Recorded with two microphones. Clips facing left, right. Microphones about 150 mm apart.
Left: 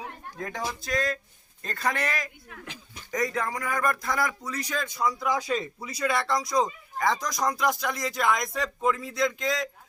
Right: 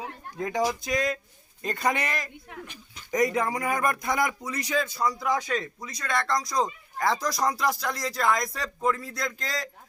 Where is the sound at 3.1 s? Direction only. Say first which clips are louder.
Right 4 dB; 15° right (ahead or behind).